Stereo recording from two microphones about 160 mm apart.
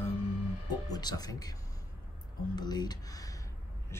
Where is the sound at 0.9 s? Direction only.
25° left (ahead or behind).